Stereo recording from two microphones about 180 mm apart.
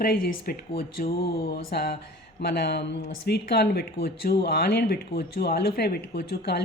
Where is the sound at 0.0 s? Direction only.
55° left (ahead or behind).